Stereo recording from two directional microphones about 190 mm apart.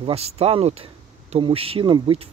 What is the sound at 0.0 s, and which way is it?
Speech, 30° right (ahead or behind).